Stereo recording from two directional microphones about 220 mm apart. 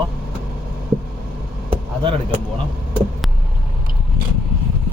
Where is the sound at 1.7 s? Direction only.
25° right (ahead or behind).